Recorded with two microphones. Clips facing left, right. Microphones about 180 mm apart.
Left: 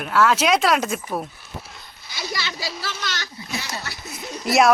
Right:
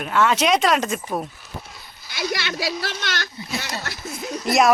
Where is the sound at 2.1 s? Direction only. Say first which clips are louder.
Right 4 dB; 60° right (ahead or behind).